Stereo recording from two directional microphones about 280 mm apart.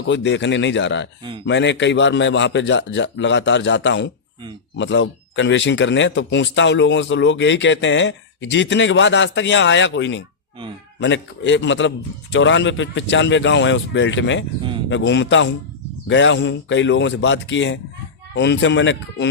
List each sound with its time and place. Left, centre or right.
0.0 s speech: left